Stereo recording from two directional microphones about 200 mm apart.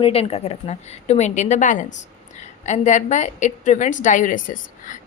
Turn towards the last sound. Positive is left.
turn(degrees=40)  # may be behind; listen again after turning